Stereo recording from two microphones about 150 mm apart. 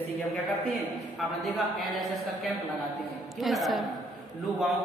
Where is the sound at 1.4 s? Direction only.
Centre (ahead or behind).